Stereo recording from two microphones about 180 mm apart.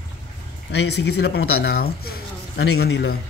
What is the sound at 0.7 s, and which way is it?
Speech, 70° left (ahead or behind).